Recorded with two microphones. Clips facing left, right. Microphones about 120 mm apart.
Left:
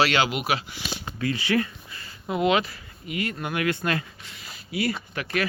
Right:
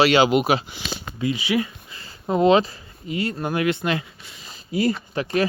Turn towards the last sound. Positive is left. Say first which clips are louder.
# right 6 dB
turn(degrees=-30)  # may be behind; listen again after turning